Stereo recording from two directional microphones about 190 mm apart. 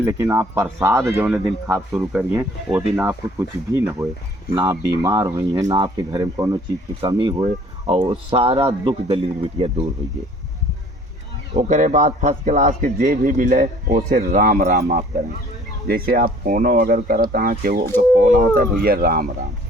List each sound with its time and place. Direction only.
0.0 s speech: 15° right (ahead or behind); by 9.7 s 30° right (ahead or behind)
11.5 s speech: 40° right (ahead or behind)